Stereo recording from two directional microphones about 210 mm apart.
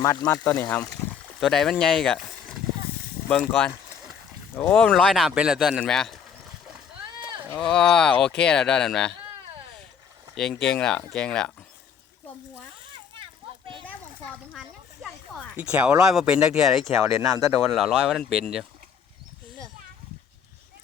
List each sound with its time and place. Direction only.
0.0 s speech: 15° left (ahead or behind)
3.2 s a sound: 5° left (ahead or behind)
4.5 s speech: 5° left (ahead or behind)
7.0 s a sound: 20° right (ahead or behind)
7.7 s speech: 5° left (ahead or behind)
10.3 s speech: 5° left (ahead or behind)
15.0 s speech: 5° right (ahead or behind)
17.7 s speech: centre (ahead or behind)